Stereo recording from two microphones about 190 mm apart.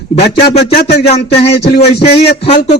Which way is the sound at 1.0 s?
35° left (ahead or behind).